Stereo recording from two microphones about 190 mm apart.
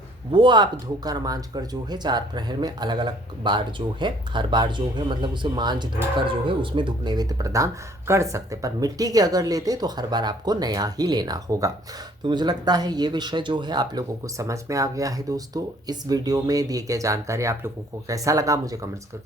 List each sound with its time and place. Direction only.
0.3 s speech: 25° right (ahead or behind)